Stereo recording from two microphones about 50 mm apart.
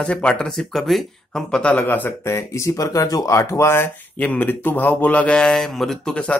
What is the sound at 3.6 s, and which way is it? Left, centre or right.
Speech, left.